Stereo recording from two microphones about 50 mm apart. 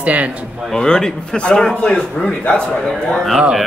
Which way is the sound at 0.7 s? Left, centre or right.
Centre.